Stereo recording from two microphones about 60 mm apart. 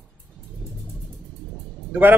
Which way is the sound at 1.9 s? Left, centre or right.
Right.